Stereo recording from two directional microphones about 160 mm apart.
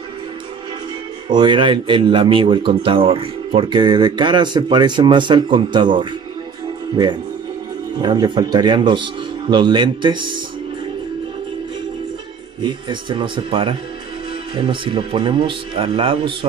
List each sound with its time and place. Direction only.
1.3 s speech: 30° right (ahead or behind)
8.0 s speech: 25° right (ahead or behind)
12.6 s speech: 30° right (ahead or behind)